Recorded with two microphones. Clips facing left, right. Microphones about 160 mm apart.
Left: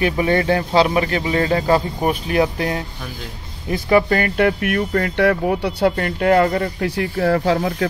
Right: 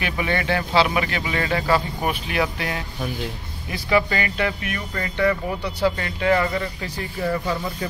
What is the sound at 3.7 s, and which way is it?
Speech, 50° left (ahead or behind).